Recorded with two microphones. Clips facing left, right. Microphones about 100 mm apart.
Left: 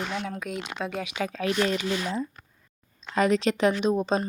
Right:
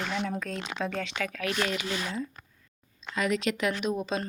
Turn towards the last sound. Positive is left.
turn(degrees=30)  # may be behind; listen again after turning